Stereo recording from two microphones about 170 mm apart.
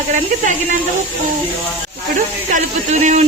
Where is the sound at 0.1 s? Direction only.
45° right (ahead or behind).